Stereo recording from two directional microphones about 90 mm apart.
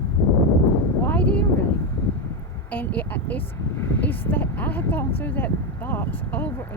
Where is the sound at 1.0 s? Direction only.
20° left (ahead or behind).